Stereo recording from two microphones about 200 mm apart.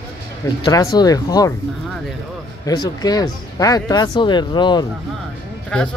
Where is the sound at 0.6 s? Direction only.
20° left (ahead or behind).